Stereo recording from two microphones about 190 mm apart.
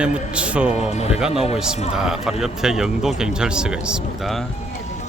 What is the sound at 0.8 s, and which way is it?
Speech, 35° left (ahead or behind).